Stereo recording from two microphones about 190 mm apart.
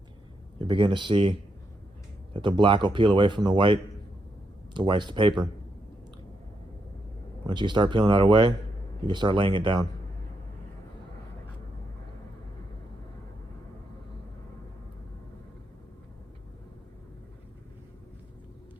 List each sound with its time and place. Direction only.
0.6 s speech: 25° right (ahead or behind)
7.4 s speech: 25° right (ahead or behind)